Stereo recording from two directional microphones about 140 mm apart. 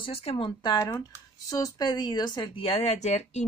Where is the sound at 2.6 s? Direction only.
50° left (ahead or behind).